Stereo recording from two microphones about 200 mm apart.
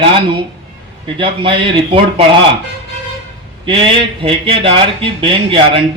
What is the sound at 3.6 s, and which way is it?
A man's voice, 25° right (ahead or behind).